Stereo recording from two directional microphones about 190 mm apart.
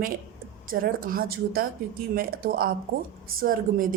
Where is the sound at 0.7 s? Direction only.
50° right (ahead or behind).